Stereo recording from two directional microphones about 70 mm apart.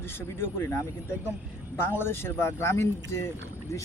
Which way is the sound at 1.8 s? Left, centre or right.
Left.